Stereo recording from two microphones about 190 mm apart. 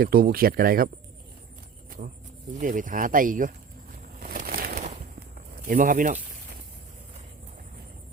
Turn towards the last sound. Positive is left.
turn(degrees=-45)  # may be behind; listen again after turning